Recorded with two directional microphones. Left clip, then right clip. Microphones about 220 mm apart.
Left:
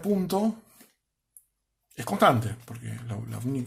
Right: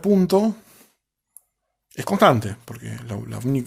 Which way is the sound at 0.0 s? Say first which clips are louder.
Right 8 dB; 40° right (ahead or behind).